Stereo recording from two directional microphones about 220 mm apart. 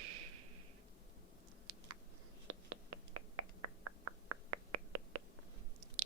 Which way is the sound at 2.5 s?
90° right.